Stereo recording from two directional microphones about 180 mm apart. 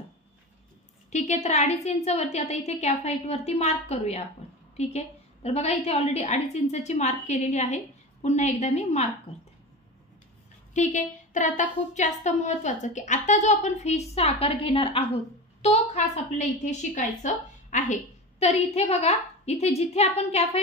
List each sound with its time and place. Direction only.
1.1 s a woman's voice: 40° left (ahead or behind)
10.7 s a woman's voice: 40° left (ahead or behind)